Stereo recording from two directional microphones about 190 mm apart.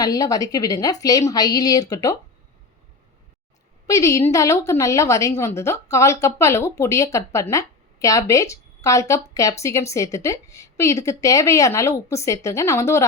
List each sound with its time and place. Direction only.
0.0 s a woman's voice: 20° left (ahead or behind)
3.8 s speech: 15° left (ahead or behind)